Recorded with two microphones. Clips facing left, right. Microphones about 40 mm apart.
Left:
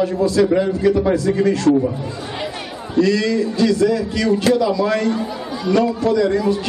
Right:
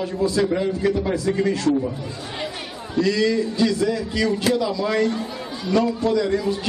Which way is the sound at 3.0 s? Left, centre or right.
Centre.